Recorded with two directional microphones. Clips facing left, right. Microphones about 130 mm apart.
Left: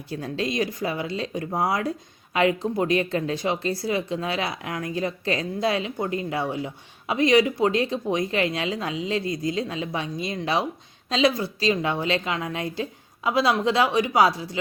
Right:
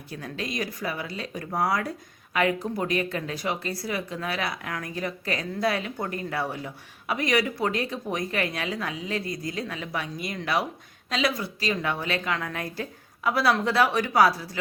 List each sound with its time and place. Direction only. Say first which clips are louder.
0.1 s speech: left 6 dB; 30° left (ahead or behind)